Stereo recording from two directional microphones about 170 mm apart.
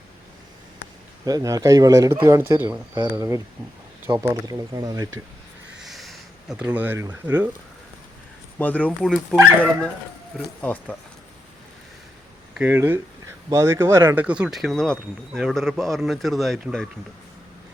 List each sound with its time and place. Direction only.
1.2 s speech: 20° right (ahead or behind)
5.8 s a sound: centre (ahead or behind)
8.5 s speech: 10° left (ahead or behind)
12.5 s speech: 10° right (ahead or behind)